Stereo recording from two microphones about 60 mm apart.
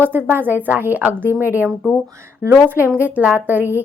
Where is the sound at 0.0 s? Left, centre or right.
Right.